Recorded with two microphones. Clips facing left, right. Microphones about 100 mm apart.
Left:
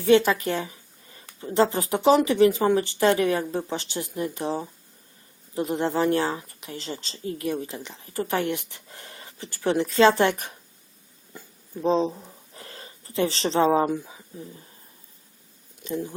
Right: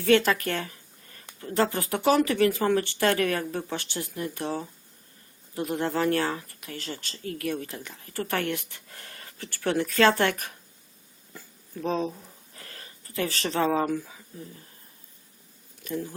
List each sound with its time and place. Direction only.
0.0 s speech: 15° left (ahead or behind)
11.3 s a sound: 20° left (ahead or behind)
15.8 s speech: 20° left (ahead or behind)